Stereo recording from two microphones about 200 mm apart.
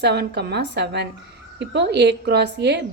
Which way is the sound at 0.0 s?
55° right (ahead or behind).